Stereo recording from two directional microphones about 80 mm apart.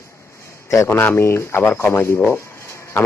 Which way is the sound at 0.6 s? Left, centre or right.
Left.